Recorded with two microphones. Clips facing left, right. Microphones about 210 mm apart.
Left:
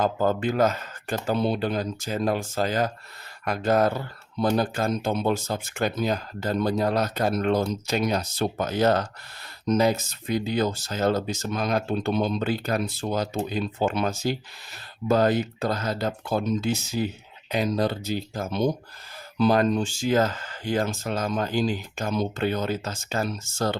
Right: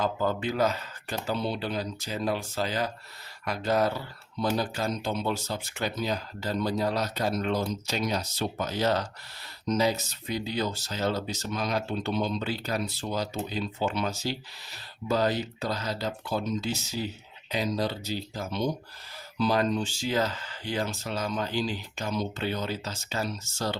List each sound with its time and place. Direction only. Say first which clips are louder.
0.0 s speech: left 5 dB; 50° left (ahead or behind)